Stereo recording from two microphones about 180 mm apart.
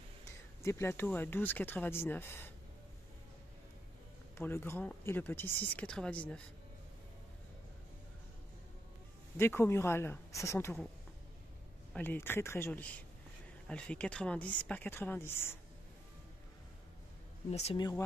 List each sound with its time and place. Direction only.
0.6 s speech: 15° left (ahead or behind)
4.4 s speech: 10° left (ahead or behind)
9.4 s speech: 15° left (ahead or behind)
11.9 s speech: 10° left (ahead or behind)
17.5 s speech: 35° left (ahead or behind)
17.7 s speech: 20° left (ahead or behind)